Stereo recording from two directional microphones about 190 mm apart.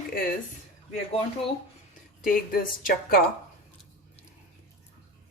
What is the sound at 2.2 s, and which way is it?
Speech, 50° left (ahead or behind).